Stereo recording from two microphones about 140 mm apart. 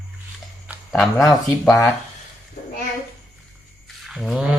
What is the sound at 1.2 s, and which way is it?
Speech, 20° left (ahead or behind).